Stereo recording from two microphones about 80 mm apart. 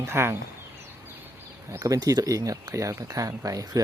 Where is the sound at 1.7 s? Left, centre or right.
Right.